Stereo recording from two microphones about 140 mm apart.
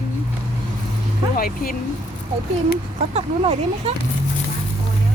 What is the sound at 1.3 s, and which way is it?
Speech, 90° left.